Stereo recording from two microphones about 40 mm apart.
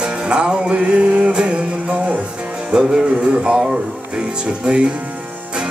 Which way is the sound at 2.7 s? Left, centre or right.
Right.